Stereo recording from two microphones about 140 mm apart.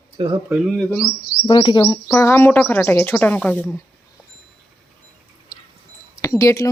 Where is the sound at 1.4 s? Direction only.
35° left (ahead or behind).